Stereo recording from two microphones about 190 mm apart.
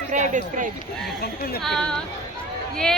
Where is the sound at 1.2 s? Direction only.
55° left (ahead or behind).